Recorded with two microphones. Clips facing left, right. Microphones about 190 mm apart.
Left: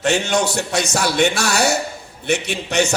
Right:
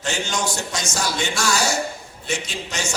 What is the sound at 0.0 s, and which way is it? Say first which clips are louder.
A man's voice: left 7 dB; 65° left (ahead or behind).